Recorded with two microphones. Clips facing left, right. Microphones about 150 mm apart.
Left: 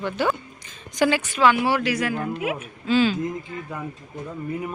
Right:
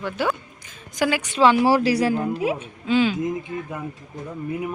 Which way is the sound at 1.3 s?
30° right (ahead or behind).